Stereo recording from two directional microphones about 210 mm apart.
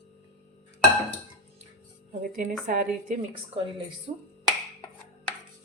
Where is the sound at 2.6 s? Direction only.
40° right (ahead or behind).